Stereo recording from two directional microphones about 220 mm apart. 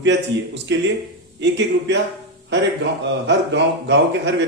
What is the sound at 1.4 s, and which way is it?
Speech, 55° right (ahead or behind).